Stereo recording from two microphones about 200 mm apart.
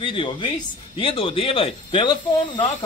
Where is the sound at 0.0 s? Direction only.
25° left (ahead or behind).